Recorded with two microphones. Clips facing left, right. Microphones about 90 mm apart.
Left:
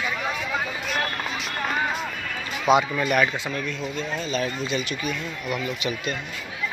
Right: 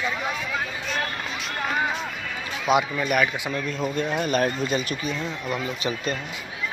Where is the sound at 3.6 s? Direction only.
45° right (ahead or behind).